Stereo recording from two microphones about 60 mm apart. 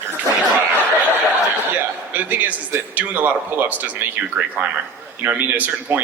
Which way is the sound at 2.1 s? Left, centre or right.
Right.